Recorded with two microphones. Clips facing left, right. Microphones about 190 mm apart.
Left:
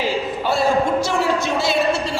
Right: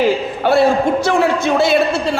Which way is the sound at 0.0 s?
60° right (ahead or behind).